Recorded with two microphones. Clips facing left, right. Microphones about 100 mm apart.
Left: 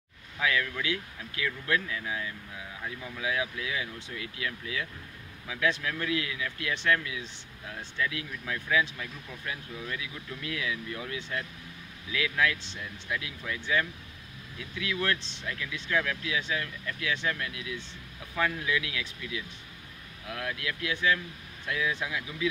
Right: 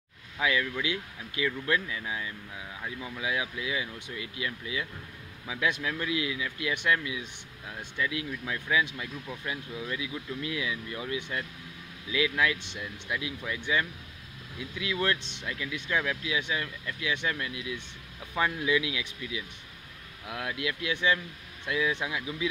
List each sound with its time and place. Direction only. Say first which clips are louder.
0.4 s speech: right 1 dB; 15° right (ahead or behind)